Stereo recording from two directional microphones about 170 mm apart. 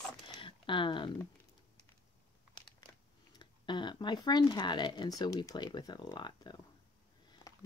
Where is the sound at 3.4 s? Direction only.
25° left (ahead or behind).